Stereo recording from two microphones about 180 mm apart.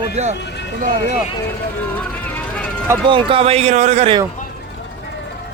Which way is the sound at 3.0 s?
30° right (ahead or behind).